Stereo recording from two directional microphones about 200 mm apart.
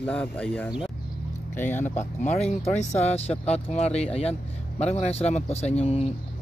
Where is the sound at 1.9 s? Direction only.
35° left (ahead or behind).